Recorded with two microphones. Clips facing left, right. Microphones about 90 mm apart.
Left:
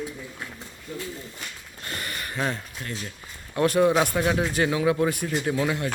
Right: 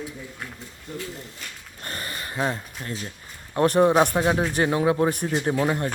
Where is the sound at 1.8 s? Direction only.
35° right (ahead or behind).